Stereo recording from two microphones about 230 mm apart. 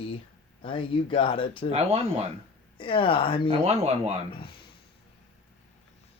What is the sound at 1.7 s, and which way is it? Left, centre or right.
Speech, right.